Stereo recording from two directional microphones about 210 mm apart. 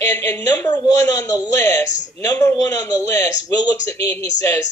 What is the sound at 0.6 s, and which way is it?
A man's voice, 20° left (ahead or behind).